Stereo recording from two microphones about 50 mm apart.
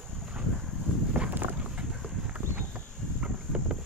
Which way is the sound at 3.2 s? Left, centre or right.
Right.